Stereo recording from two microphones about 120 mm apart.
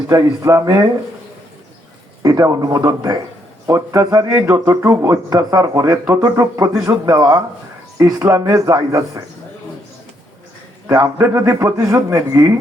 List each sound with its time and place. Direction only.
0.1 s speech: 25° right (ahead or behind)
2.2 s a man's voice: 30° right (ahead or behind)
10.8 s a man's voice: 25° right (ahead or behind)